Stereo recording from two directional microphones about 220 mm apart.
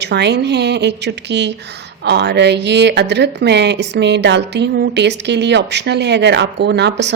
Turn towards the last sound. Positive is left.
turn(degrees=-50)  # may be behind; listen again after turning